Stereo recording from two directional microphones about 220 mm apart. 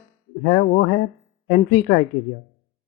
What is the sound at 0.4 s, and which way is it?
Speech, 45° left (ahead or behind).